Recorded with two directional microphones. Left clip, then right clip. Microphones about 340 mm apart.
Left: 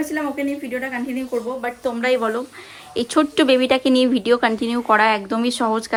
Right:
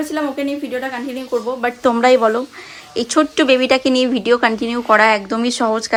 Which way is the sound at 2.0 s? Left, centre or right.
Centre.